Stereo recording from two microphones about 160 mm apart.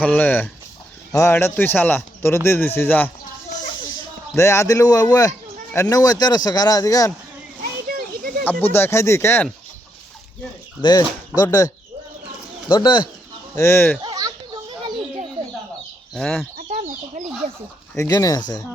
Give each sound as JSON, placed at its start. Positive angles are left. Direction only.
{"t": 0.0, "sound": "speech", "side_deg": 10}
{"t": 3.8, "sound": "speech", "side_deg": 25}
{"t": 7.9, "sound": "a sound", "side_deg": -65}
{"t": 8.7, "sound": "speech", "side_deg": 15}
{"t": 10.8, "sound": "speech", "side_deg": 25}
{"t": 13.6, "sound": "speech", "side_deg": 15}
{"t": 14.0, "sound": "chicken", "side_deg": -25}
{"t": 16.1, "sound": "speech", "side_deg": 5}
{"t": 16.6, "sound": "chicken", "side_deg": -50}
{"t": 17.9, "sound": "speech", "side_deg": 20}